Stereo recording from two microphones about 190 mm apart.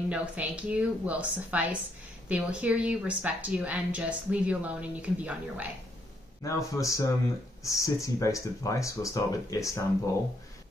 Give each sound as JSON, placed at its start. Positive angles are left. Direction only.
{"t": 0.1, "sound": "a woman's voice", "side_deg": -5}
{"t": 6.4, "sound": "speech", "side_deg": 15}